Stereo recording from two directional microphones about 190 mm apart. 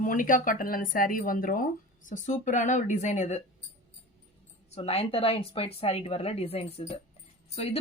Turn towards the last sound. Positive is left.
turn(degrees=30)  # may be behind; listen again after turning